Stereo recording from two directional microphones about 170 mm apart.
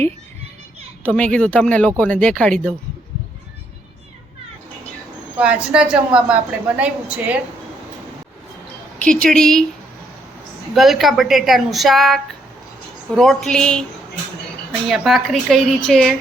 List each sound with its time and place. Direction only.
1.0 s a woman's voice: 5° left (ahead or behind)
5.4 s a woman's voice: 5° right (ahead or behind)
9.0 s a woman's voice: 5° left (ahead or behind)
10.8 s a woman's voice: centre (ahead or behind)
14.8 s a woman's voice: centre (ahead or behind)